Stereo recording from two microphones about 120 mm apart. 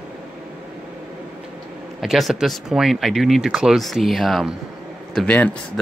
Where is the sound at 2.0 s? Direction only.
5° right (ahead or behind).